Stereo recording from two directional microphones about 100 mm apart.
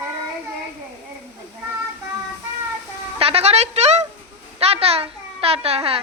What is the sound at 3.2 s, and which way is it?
A child's voice, 85° right.